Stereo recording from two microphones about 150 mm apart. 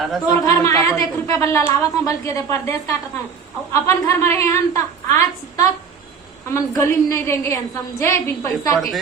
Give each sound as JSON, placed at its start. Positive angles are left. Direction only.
{"t": 0.0, "sound": "speech", "side_deg": 0}
{"t": 0.4, "sound": "a woman's voice", "side_deg": 20}